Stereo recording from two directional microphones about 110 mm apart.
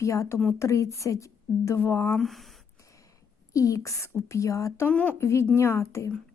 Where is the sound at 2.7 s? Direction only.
30° left (ahead or behind).